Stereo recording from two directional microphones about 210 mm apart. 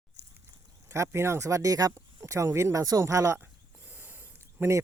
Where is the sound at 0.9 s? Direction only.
15° right (ahead or behind).